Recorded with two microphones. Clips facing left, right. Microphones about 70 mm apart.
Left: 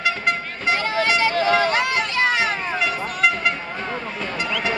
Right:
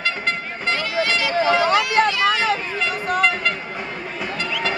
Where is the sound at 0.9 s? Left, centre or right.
Left.